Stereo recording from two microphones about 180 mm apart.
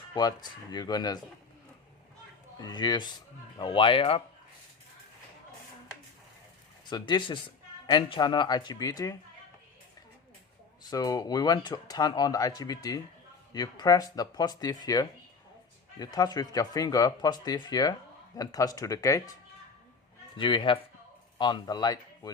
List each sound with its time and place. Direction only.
0.1 s speech: 25° left (ahead or behind)
2.6 s speech: 25° left (ahead or behind)
6.9 s speech: 25° left (ahead or behind)
10.8 s speech: 20° left (ahead or behind)
20.3 s speech: 25° left (ahead or behind)